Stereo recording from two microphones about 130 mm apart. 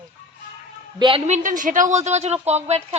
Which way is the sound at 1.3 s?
80° right.